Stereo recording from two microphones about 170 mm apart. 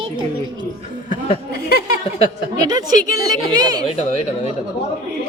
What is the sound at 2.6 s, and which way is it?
Speech, 25° right (ahead or behind).